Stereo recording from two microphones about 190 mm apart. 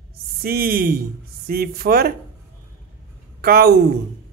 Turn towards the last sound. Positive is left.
turn(degrees=-55)  # may be behind; listen again after turning